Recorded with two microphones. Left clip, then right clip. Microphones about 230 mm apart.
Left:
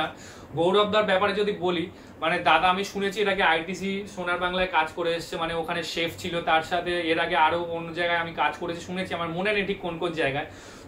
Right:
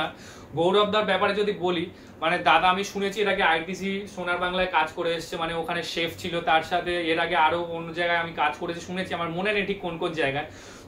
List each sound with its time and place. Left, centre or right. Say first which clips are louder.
0.6 s speech: even; centre